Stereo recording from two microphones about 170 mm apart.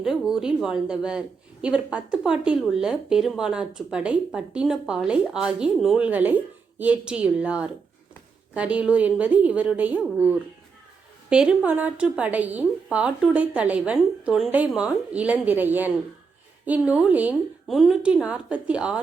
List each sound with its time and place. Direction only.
0.0 s a woman's voice: centre (ahead or behind)